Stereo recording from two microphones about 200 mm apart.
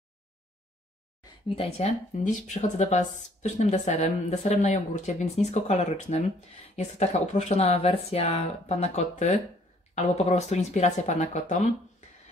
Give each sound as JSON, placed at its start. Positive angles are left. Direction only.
{"t": 1.5, "sound": "speech", "side_deg": 30}